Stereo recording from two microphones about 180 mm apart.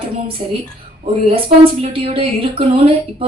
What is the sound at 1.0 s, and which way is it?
Speech, 30° right (ahead or behind).